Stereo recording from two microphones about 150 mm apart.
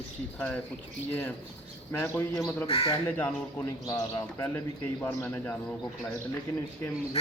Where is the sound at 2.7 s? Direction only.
40° left (ahead or behind).